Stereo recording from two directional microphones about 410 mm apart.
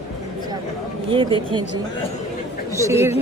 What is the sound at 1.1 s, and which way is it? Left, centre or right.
A woman's voice, centre.